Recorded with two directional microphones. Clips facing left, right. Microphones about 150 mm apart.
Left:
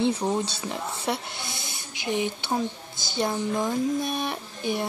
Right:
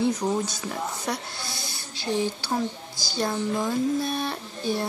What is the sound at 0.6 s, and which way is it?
Speech, 25° left (ahead or behind).